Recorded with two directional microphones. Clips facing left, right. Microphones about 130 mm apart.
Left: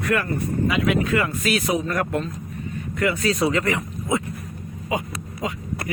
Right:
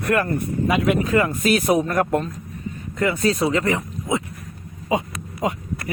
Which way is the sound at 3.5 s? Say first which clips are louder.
Right 2 dB; 25° right (ahead or behind).